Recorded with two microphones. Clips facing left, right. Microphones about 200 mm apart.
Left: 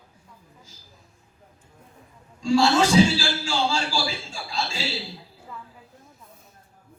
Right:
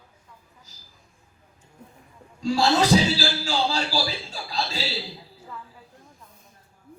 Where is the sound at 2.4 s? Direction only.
35° right (ahead or behind).